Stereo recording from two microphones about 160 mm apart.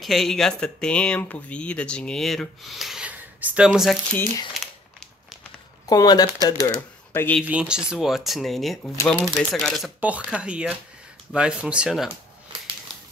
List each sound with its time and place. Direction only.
0.0 s speech: centre (ahead or behind)
4.6 s crumpling: centre (ahead or behind)
5.9 s speech: 25° left (ahead or behind)
7.4 s speech: 5° right (ahead or behind)